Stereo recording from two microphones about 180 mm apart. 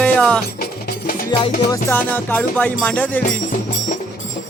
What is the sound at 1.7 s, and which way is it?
Speech, 10° left (ahead or behind).